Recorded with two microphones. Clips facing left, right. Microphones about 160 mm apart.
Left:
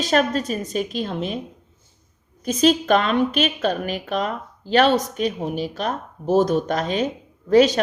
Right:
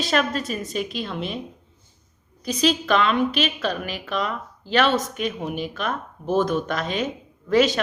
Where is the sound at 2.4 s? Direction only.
45° left (ahead or behind).